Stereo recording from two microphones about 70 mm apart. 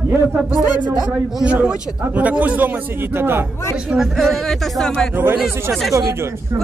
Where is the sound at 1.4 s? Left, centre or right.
Right.